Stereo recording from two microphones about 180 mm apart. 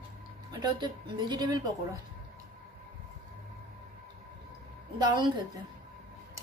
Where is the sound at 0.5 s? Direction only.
25° right (ahead or behind).